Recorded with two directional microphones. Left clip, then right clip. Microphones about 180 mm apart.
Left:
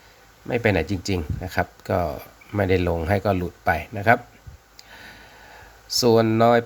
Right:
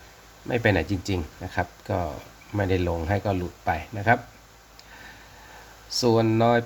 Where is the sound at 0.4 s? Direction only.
20° left (ahead or behind).